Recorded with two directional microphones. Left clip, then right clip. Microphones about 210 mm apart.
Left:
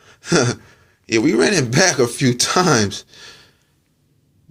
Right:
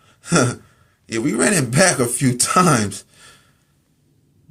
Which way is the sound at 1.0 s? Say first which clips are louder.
Left 4 dB; 25° left (ahead or behind).